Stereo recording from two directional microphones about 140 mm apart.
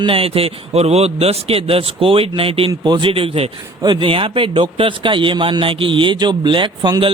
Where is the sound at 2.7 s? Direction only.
30° right (ahead or behind).